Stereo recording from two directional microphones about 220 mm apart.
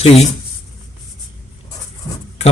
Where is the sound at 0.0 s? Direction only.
30° left (ahead or behind).